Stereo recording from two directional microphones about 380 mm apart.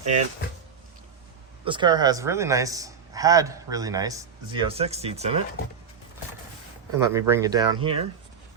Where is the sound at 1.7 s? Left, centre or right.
Centre.